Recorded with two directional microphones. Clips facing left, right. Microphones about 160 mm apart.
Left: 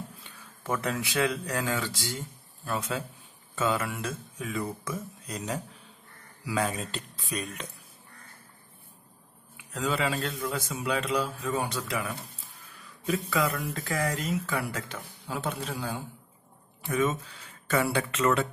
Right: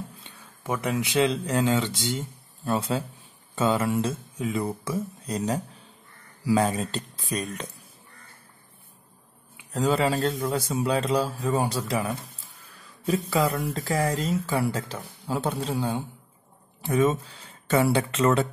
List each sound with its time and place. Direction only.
0.7 s speech: 15° right (ahead or behind); by 7.6 s 40° right (ahead or behind)
9.7 s speech: 35° right (ahead or behind)